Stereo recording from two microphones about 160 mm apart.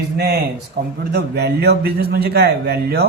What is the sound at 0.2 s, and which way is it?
A man's voice, 80° right.